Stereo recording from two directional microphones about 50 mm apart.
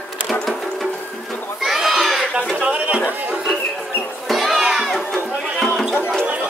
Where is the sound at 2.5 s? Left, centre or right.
Right.